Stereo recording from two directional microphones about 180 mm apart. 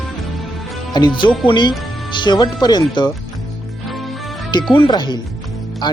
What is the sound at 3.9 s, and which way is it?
Music, centre (ahead or behind).